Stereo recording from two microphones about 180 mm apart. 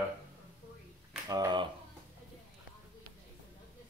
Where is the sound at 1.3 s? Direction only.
20° right (ahead or behind).